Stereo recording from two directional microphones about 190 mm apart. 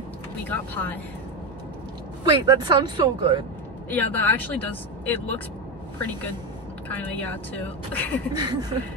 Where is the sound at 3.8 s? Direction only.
10° left (ahead or behind).